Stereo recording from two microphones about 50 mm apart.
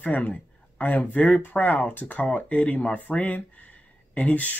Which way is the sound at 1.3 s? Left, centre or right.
Left.